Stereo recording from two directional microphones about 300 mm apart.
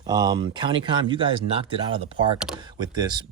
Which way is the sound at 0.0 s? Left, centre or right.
Centre.